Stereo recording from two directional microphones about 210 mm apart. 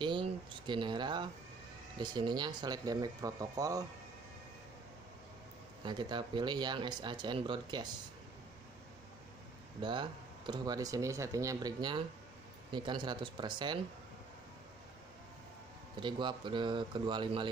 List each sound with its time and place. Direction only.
0.0 s a sound: 25° right (ahead or behind)
2.0 s speech: 20° right (ahead or behind)
5.9 s speech: 20° right (ahead or behind)
9.8 s speech: 20° right (ahead or behind)
16.0 s speech: 20° right (ahead or behind)